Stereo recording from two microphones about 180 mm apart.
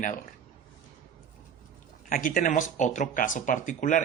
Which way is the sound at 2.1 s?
50° left (ahead or behind).